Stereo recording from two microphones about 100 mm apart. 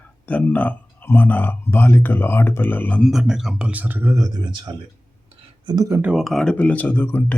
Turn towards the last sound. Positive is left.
turn(degrees=15)  # may be behind; listen again after turning